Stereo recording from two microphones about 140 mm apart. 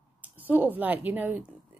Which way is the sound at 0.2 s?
10° right (ahead or behind).